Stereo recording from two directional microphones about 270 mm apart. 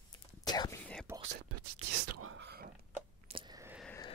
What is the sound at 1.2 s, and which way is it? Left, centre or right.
Whispering, right.